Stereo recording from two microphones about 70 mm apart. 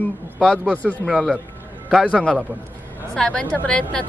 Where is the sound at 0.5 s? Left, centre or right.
Centre.